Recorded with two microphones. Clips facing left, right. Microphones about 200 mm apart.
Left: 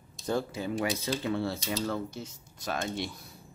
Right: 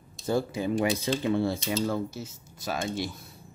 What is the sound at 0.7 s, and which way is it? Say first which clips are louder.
Speech: right 4 dB; 30° right (ahead or behind).